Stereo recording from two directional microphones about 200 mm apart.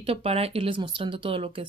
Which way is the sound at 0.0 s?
30° right (ahead or behind).